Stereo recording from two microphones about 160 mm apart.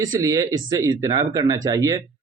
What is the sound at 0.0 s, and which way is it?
Speech, 20° right (ahead or behind).